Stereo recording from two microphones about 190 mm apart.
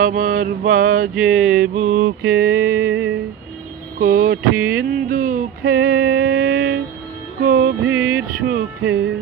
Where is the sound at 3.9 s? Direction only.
50° right (ahead or behind).